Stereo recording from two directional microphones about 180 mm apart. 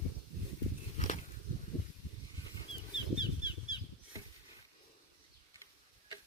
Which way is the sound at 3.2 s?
25° left (ahead or behind).